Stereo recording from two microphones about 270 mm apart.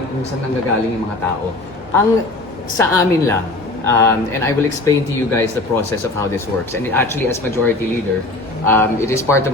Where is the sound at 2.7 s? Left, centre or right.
Centre.